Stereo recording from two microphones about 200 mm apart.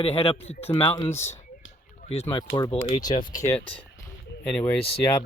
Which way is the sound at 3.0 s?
20° left (ahead or behind).